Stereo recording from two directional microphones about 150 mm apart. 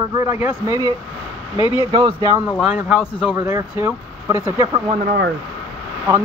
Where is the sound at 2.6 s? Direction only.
5° right (ahead or behind).